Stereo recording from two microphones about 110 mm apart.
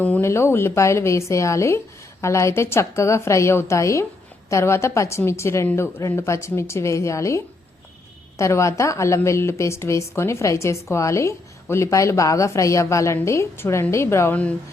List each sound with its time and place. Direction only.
0.0 s a woman's voice: 15° left (ahead or behind)